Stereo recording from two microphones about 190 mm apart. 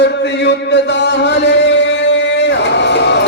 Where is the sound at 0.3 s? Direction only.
65° left (ahead or behind).